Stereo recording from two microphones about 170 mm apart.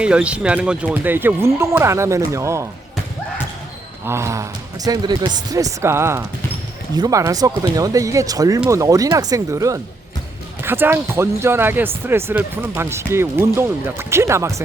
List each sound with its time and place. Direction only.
0.0 s speech: 5° right (ahead or behind)
4.0 s speech: 15° right (ahead or behind)